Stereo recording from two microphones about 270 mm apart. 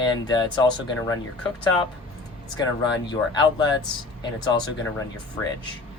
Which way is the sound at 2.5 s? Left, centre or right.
Centre.